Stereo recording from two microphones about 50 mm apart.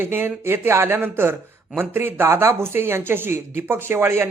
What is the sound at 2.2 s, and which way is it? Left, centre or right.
A man's voice, right.